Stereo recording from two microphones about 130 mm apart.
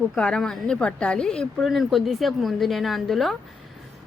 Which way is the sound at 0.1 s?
5° left (ahead or behind).